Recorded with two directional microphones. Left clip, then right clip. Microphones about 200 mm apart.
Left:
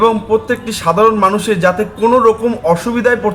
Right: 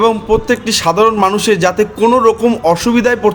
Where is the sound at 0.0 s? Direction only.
45° right (ahead or behind).